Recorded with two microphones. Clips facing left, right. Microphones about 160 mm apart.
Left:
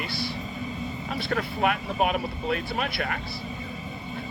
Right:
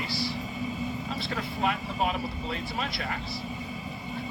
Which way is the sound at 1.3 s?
65° left (ahead or behind).